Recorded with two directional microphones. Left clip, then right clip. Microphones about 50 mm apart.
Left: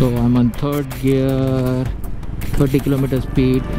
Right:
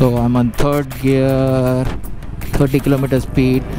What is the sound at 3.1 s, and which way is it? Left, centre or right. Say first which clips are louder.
Speech: right 2 dB; right.